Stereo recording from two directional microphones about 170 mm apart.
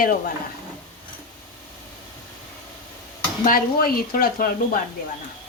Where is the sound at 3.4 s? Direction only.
55° left (ahead or behind).